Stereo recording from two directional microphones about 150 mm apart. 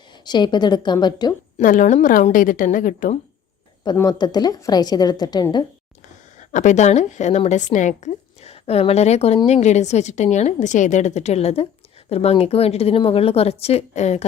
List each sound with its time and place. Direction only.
0.3 s a woman's voice: 30° left (ahead or behind)
1.6 s a woman's voice: 60° left (ahead or behind)
3.9 s a woman's voice: 25° left (ahead or behind)
6.5 s a woman's voice: 55° left (ahead or behind)